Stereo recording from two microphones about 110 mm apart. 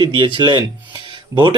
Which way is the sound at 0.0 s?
45° right (ahead or behind).